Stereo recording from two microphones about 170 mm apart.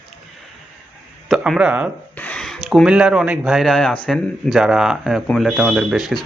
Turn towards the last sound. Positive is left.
turn(degrees=0)  # may be behind; listen again after turning